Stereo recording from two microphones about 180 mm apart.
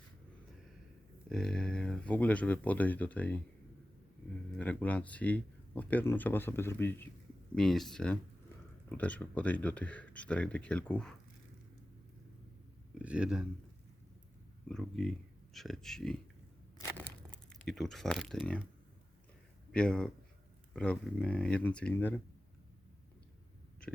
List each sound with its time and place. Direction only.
1.3 s speech: 5° left (ahead or behind)
4.5 s speech: 10° left (ahead or behind)
7.5 s speech: centre (ahead or behind)
13.0 s speech: 5° right (ahead or behind)
14.7 s speech: 5° left (ahead or behind)
17.0 s a sound: 5° left (ahead or behind)
19.7 s speech: 5° left (ahead or behind)